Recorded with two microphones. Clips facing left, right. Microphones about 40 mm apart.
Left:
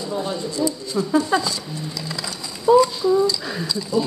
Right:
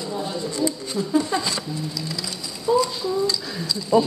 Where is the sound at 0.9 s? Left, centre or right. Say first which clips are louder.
Left 4 dB; left.